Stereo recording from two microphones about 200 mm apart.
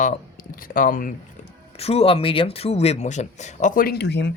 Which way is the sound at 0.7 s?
45° left (ahead or behind).